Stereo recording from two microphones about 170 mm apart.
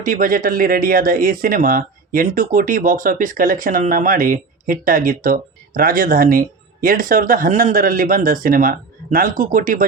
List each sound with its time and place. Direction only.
0.0 s speech: 50° right (ahead or behind)